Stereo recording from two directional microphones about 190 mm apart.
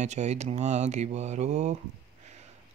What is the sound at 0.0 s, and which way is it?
Speech, 35° right (ahead or behind).